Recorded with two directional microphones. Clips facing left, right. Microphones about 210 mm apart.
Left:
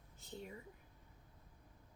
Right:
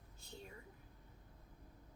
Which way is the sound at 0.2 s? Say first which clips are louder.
Left 5 dB; 20° left (ahead or behind).